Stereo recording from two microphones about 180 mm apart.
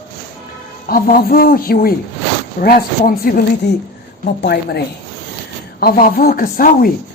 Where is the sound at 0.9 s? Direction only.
55° left (ahead or behind).